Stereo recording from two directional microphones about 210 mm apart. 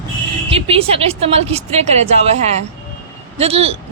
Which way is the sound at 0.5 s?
25° right (ahead or behind).